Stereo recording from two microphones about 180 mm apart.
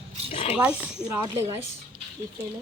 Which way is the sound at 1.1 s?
15° right (ahead or behind).